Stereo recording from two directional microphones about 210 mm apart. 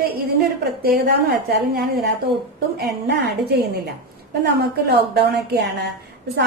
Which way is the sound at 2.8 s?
50° right (ahead or behind).